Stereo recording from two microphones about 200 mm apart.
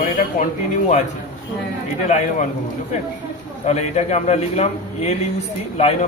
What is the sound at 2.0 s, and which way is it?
Speech, 35° left (ahead or behind).